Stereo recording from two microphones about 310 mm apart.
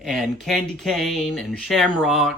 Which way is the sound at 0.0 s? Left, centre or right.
Centre.